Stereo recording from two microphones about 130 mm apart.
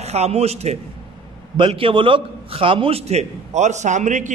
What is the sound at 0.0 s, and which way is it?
Speech, 55° right (ahead or behind).